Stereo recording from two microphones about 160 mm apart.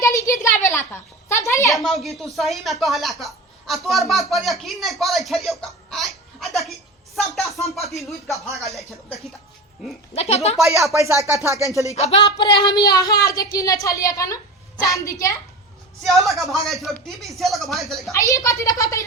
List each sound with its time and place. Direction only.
0.0 s a woman's voice: 20° left (ahead or behind)
1.3 s a sound: 20° left (ahead or behind)
1.7 s speech: centre (ahead or behind)
10.2 s speech: 40° left (ahead or behind)
10.6 s speech: 20° right (ahead or behind)
11.9 s speech: 40° left (ahead or behind)
12.4 s a woman's voice: 30° left (ahead or behind)
16.0 s speech: centre (ahead or behind)
18.1 s a woman's voice: 20° left (ahead or behind)